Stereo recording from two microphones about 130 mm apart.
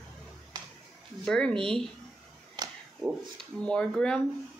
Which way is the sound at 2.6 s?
30° right (ahead or behind).